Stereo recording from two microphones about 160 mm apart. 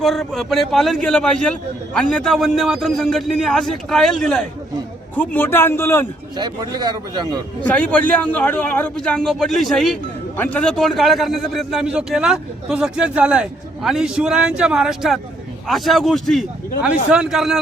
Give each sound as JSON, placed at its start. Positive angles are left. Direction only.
{"t": 0.0, "sound": "a man's voice", "side_deg": 0}
{"t": 6.3, "sound": "a man's voice", "side_deg": -25}
{"t": 7.6, "sound": "a man's voice", "side_deg": 10}